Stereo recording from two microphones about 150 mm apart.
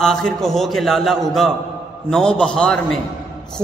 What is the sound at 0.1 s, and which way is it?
A man's voice, 5° left (ahead or behind).